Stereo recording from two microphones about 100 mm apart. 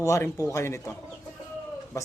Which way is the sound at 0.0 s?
30° left (ahead or behind).